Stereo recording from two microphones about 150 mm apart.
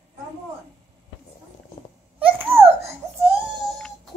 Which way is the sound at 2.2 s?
10° right (ahead or behind).